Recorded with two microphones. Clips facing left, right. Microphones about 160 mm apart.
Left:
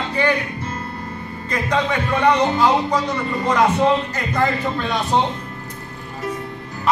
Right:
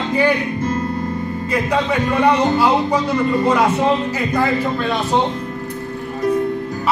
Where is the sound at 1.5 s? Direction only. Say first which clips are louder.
Right 2 dB; 10° right (ahead or behind).